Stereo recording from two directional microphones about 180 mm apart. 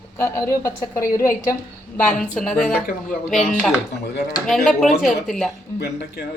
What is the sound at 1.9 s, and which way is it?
A woman's voice, 5° left (ahead or behind).